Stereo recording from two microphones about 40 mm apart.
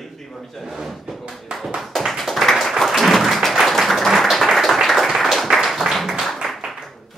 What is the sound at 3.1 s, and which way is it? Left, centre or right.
Applause, centre.